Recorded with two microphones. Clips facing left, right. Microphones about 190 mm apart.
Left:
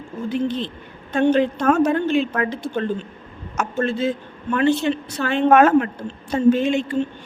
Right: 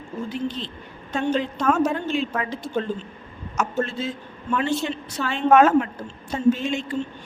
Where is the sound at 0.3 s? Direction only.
60° left (ahead or behind).